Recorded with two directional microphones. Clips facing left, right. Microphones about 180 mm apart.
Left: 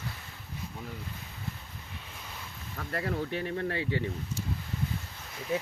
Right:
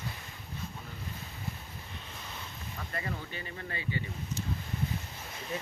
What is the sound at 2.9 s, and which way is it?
Speech, 70° left (ahead or behind).